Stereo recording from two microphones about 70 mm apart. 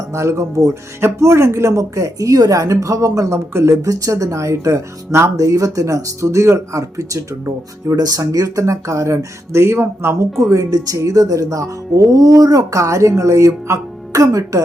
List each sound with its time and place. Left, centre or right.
0.1 s a woman's voice: right
7.9 s a woman's voice: right
10.5 s a woman's voice: right